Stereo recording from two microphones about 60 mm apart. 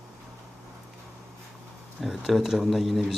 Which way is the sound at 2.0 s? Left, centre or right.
Centre.